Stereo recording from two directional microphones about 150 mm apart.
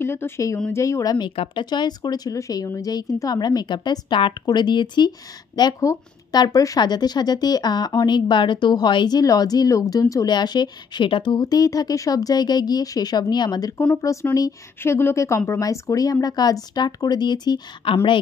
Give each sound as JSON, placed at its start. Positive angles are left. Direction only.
{"t": 0.0, "sound": "speech", "side_deg": 15}